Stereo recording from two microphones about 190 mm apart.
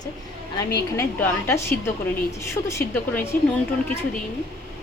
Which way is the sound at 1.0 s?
15° left (ahead or behind).